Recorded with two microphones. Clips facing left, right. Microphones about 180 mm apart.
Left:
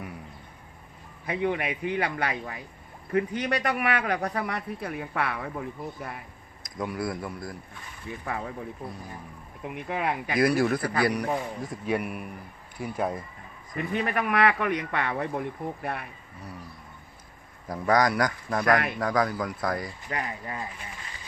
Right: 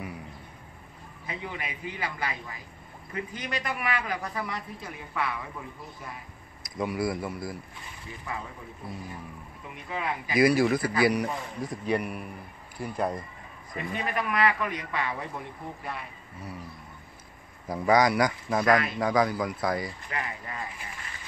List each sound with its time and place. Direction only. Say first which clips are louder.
1.2 s a man's voice: left 10 dB; 60° left (ahead or behind)
6.6 s a man's voice: right 2 dB; 5° right (ahead or behind)
9.8 s a man's voice: left 4 dB; 55° left (ahead or behind)
10.3 s a man's voice: right 2 dB; 5° right (ahead or behind)
13.7 s a man's voice: left 3 dB; 60° left (ahead or behind)
17.6 s a man's voice: right 1 dB; centre (ahead or behind)
20.1 s speech: left 2 dB; 35° left (ahead or behind)